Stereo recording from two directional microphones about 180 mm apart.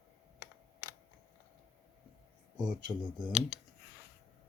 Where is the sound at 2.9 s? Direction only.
25° right (ahead or behind).